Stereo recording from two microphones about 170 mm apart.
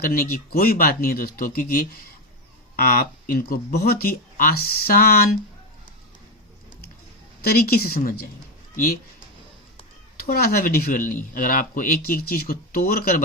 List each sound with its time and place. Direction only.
0.0 s speech: 60° left (ahead or behind)
7.4 s speech: 65° left (ahead or behind)
10.2 s speech: 65° left (ahead or behind)